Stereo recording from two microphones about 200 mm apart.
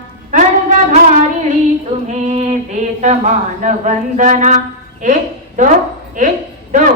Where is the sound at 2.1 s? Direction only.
35° right (ahead or behind).